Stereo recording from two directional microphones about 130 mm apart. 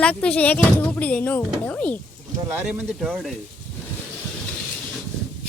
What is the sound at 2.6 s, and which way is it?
Speech, 5° right (ahead or behind).